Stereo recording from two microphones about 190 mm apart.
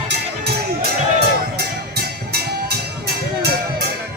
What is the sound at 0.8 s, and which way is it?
Music, 55° right (ahead or behind).